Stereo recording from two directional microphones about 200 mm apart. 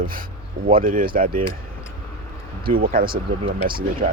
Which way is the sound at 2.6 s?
45° right (ahead or behind).